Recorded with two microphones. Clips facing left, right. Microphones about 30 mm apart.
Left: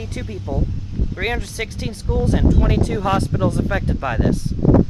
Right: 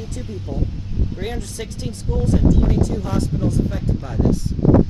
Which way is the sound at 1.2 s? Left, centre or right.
Left.